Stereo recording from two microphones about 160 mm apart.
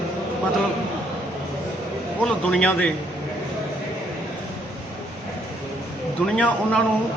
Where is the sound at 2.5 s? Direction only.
10° left (ahead or behind).